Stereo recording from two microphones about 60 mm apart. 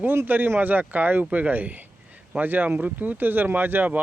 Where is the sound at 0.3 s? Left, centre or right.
Right.